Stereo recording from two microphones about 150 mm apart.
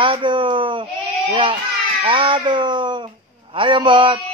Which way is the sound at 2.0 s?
35° right (ahead or behind).